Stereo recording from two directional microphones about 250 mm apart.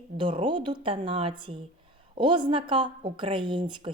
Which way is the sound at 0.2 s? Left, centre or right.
Centre.